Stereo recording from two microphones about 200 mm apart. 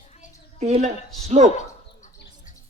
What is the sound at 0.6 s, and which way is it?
Speech, 30° right (ahead or behind).